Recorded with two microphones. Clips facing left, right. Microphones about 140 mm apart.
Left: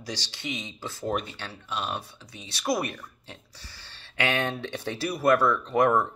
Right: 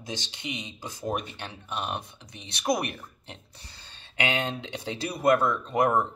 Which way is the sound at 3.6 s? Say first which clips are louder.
Left 1 dB; 20° right (ahead or behind).